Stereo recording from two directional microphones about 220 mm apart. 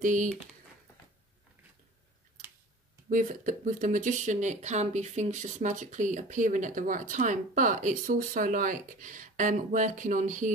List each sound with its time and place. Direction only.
0.0 s speech: 35° right (ahead or behind)
3.1 s speech: 35° right (ahead or behind)